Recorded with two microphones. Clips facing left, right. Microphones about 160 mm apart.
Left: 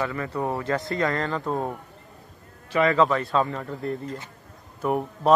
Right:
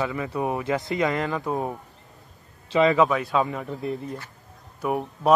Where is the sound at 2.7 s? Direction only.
15° right (ahead or behind).